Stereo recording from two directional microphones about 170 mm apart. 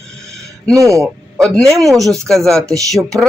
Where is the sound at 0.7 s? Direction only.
20° right (ahead or behind).